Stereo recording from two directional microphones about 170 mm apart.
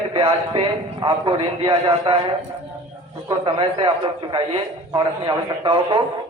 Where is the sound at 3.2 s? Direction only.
30° right (ahead or behind).